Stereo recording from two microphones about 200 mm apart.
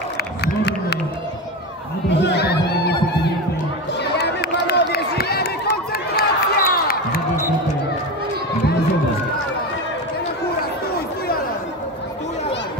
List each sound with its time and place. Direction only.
0.6 s run: 60° left (ahead or behind)
2.0 s chatter: 60° left (ahead or behind)
4.0 s a sound: 55° left (ahead or behind)